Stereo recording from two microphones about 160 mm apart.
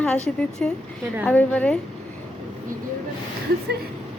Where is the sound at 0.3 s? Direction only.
5° left (ahead or behind).